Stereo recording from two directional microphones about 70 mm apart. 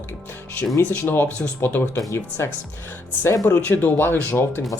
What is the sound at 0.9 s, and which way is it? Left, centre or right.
Speech, left.